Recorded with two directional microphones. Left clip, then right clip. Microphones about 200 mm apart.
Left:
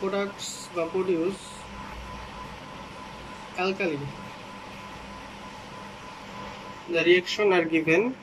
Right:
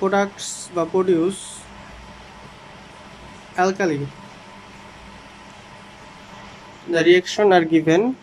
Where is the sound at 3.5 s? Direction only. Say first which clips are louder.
Right 8 dB; 40° right (ahead or behind).